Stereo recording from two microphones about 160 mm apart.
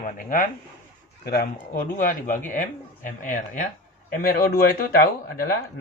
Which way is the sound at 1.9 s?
50° left (ahead or behind).